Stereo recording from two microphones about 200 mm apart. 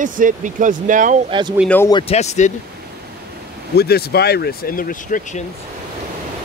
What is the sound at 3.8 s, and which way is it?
Speech, 50° left (ahead or behind).